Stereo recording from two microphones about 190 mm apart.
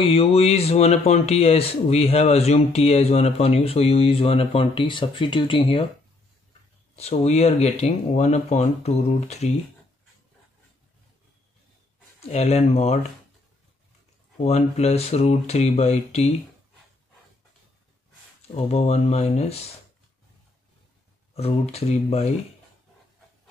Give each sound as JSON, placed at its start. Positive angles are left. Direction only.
{"t": 0.0, "sound": "speech", "side_deg": 30}
{"t": 7.0, "sound": "speech", "side_deg": 35}
{"t": 12.3, "sound": "speech", "side_deg": 35}
{"t": 14.4, "sound": "speech", "side_deg": 35}
{"t": 18.7, "sound": "speech", "side_deg": 35}
{"t": 21.4, "sound": "speech", "side_deg": 35}